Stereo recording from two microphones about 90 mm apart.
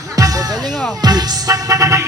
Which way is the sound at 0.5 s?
Centre (ahead or behind).